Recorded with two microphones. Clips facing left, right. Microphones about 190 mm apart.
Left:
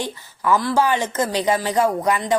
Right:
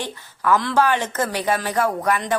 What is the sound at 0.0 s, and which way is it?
Speech, 10° left (ahead or behind).